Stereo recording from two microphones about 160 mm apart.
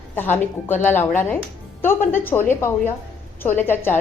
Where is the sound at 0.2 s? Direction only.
10° left (ahead or behind).